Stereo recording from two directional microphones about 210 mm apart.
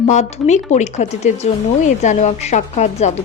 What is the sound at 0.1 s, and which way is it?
Speech, 35° left (ahead or behind).